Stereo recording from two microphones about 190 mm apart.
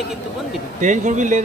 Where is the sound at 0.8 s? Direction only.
40° right (ahead or behind).